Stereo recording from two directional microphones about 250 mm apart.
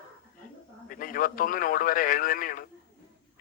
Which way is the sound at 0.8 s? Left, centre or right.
Left.